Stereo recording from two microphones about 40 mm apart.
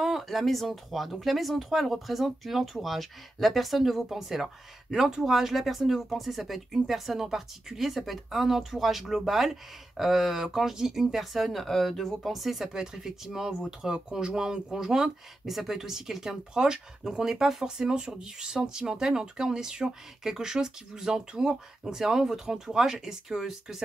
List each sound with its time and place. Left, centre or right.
0.2 s speech: centre